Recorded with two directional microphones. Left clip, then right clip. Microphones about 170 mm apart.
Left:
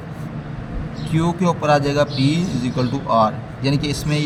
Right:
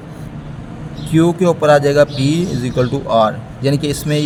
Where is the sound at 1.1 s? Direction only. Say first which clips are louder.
Right 7 dB; 50° right (ahead or behind).